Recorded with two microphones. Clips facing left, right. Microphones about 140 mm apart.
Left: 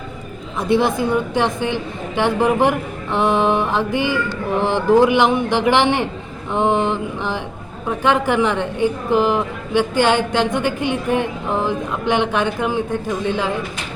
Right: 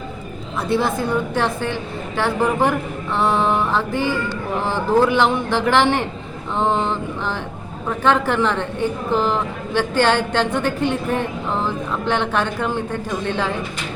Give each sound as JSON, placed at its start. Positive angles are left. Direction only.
{"t": 0.7, "sound": "a woman's voice", "side_deg": 15}